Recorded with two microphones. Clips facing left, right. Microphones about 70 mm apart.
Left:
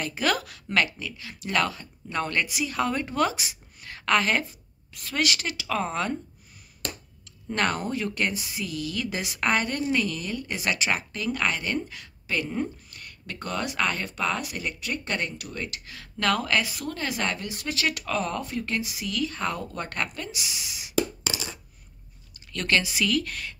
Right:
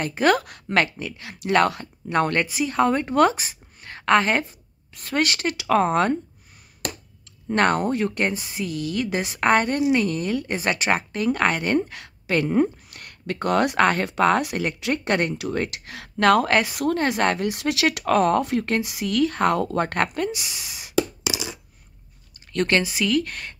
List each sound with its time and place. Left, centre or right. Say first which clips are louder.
0.0 s speech: right 7 dB; right
1.7 s speech: right 8 dB; right
2.4 s a woman's voice: right 6 dB; right
7.4 s a woman's voice: right 7 dB; right
10.2 s speech: right 8 dB; right
10.5 s speech: right 2 dB; right
18.0 s speech: right 10 dB; right
20.0 s speech: right 8 dB; right
21.2 s coin: right 4 dB; centre
22.5 s a woman's voice: right 4 dB; right